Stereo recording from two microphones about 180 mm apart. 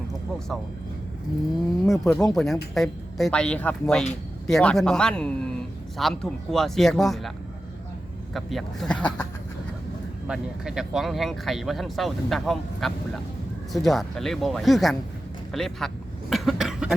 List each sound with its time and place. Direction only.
0.3 s speech: 5° left (ahead or behind)
1.9 s speech: 5° left (ahead or behind)
8.3 s speech: centre (ahead or behind)
10.2 s speech: 5° right (ahead or behind)
16.3 s cough: centre (ahead or behind)